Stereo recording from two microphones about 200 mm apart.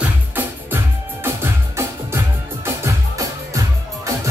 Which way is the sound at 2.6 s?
15° right (ahead or behind).